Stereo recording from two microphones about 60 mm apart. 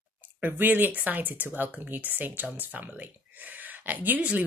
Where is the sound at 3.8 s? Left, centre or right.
Right.